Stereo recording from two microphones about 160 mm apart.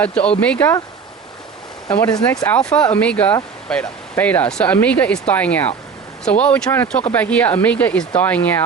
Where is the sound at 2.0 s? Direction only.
20° left (ahead or behind).